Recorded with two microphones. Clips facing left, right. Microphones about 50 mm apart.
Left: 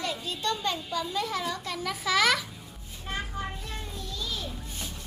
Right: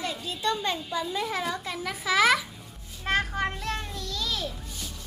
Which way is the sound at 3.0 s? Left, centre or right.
Right.